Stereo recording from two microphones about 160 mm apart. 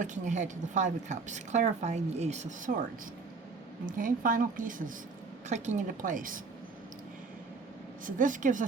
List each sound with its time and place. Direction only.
0.0 s speech: 50° right (ahead or behind)
3.8 s a woman's voice: 60° right (ahead or behind)
8.0 s speech: 55° right (ahead or behind)